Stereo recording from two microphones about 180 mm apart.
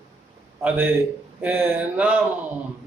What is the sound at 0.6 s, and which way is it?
A man's voice, 10° right (ahead or behind).